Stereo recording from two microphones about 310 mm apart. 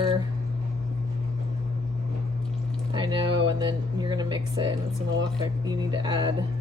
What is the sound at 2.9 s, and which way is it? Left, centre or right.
Speech, centre.